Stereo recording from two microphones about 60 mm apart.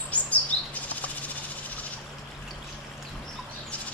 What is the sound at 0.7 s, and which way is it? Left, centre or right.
Bird flight, left.